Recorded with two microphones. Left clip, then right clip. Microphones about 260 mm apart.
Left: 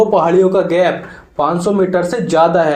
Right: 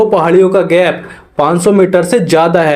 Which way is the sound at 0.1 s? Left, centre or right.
Right.